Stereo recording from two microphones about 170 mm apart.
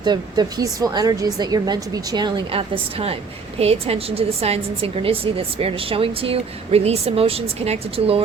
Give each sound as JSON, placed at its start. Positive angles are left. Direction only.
{"t": 0.0, "sound": "a woman's voice", "side_deg": -25}